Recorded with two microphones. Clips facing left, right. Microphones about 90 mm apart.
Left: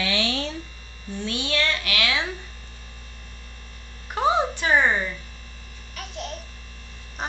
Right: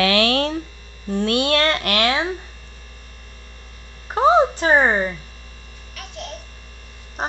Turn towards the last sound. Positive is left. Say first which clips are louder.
# even
turn(degrees=0)  # may be behind; listen again after turning